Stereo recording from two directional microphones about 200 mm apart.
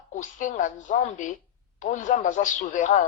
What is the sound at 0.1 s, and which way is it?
A woman's voice, 40° left (ahead or behind).